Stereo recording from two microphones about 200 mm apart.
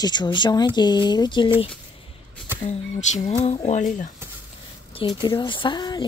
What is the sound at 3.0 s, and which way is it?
Speech, 35° left (ahead or behind).